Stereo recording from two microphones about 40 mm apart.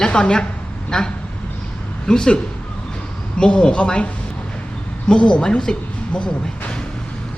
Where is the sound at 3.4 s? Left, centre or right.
Left.